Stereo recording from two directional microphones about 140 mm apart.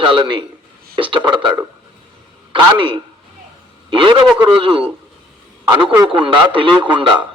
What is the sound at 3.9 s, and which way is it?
A man's voice, 40° right (ahead or behind).